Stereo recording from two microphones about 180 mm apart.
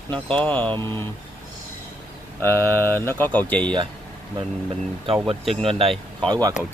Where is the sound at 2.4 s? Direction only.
10° left (ahead or behind).